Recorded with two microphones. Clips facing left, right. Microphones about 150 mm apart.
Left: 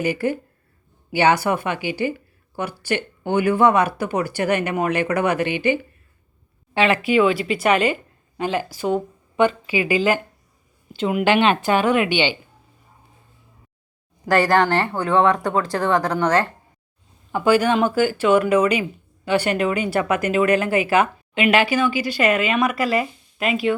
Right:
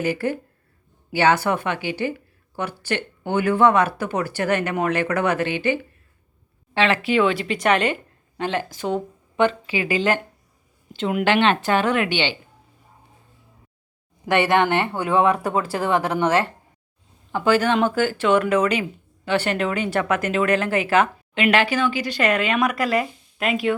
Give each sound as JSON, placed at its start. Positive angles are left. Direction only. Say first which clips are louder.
{"t": 0.0, "sound": "speech", "louder": "left 1 dB", "side_deg": 10}
{"t": 14.3, "sound": "speech", "louder": "left 1 dB", "side_deg": -5}
{"t": 16.1, "sound": "speech", "louder": "left 1 dB", "side_deg": -25}
{"t": 17.3, "sound": "speech", "louder": "left 2 dB", "side_deg": 10}